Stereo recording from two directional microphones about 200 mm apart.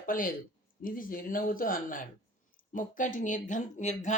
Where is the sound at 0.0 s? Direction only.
45° left (ahead or behind).